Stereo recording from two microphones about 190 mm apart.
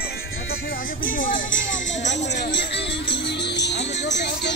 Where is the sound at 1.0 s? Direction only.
45° left (ahead or behind).